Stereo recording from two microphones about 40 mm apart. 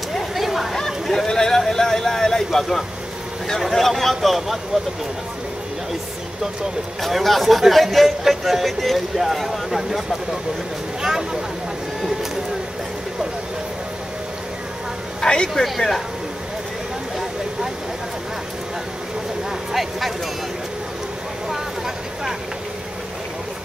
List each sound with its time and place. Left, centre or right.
0.3 s a sound: centre
0.7 s a sound: centre
3.6 s speech: centre
7.0 s speech: centre
11.0 s a sound: centre
15.1 s speech: centre
15.5 s speech: centre
19.7 s speech: centre
21.5 s vehicle: centre